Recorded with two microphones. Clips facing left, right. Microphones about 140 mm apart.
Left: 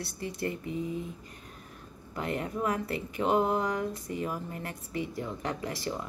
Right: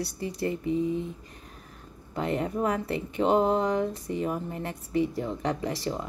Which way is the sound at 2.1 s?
30° right (ahead or behind).